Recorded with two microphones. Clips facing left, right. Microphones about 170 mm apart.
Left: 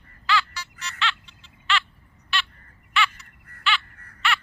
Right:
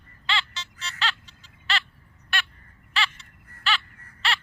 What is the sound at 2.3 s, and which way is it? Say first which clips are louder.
Fowl: left 2 dB; 50° right (ahead or behind).